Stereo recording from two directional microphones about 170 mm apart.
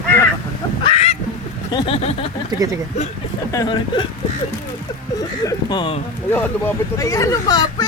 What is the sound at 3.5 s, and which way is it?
Speech, 25° left (ahead or behind).